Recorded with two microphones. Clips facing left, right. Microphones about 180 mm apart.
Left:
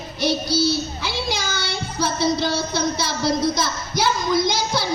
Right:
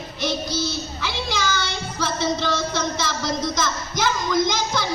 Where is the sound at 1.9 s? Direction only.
40° left (ahead or behind).